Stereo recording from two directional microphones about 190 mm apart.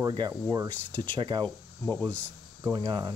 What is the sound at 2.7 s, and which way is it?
Speech, 25° right (ahead or behind).